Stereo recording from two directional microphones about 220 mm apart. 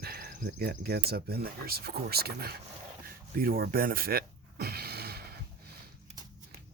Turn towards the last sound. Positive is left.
turn(degrees=-45)  # may be behind; listen again after turning